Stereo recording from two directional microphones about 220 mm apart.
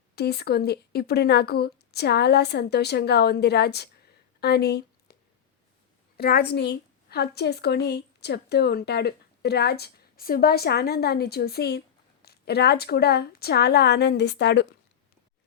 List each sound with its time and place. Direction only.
0.2 s a woman's voice: 45° left (ahead or behind)
4.4 s a sound: 45° left (ahead or behind)
6.1 s a woman's voice: 45° left (ahead or behind)